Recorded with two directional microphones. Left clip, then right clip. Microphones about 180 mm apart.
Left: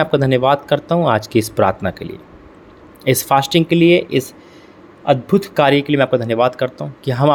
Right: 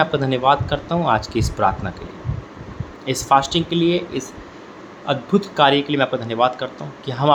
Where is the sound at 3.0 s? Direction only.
60° left (ahead or behind).